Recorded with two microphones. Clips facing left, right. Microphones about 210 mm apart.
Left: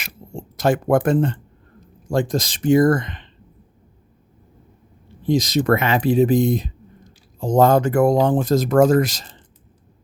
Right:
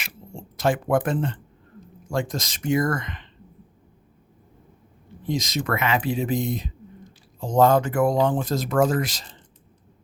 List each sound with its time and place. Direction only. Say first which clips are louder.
0.0 s a sound: left 5 dB; 40° left (ahead or behind)
2.0 s speech: left 6 dB; 35° left (ahead or behind)
5.2 s speech: left 8 dB; 30° left (ahead or behind)